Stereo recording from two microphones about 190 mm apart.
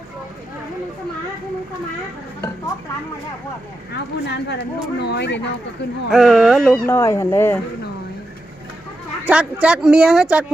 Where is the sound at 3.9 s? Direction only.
60° left (ahead or behind).